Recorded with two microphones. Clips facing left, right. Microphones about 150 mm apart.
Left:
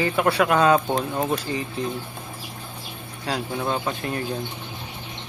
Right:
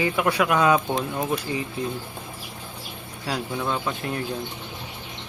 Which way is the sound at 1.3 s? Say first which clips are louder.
Even; 10° right (ahead or behind).